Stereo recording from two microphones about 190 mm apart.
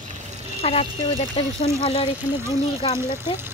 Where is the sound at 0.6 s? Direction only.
30° left (ahead or behind).